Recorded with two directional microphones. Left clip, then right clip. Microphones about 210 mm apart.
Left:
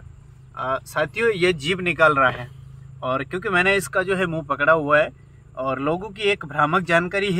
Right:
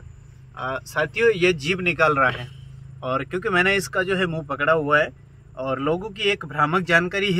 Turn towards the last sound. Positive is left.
turn(degrees=5)  # may be behind; listen again after turning